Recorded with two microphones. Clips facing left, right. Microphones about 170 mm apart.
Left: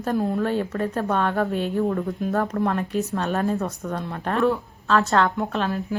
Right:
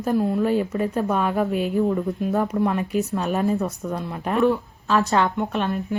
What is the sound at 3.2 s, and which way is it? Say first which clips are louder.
Speech: left 1 dB; 15° right (ahead or behind).